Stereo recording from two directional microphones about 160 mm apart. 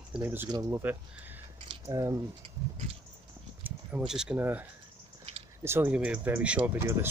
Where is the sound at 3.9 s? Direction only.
5° right (ahead or behind).